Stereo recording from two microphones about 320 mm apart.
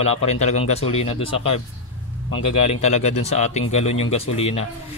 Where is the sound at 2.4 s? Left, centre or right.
Left.